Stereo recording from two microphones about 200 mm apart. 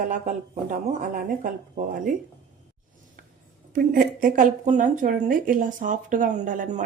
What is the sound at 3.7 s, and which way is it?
Speech, 40° right (ahead or behind).